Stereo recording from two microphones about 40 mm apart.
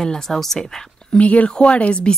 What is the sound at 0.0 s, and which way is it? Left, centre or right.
Speech, centre.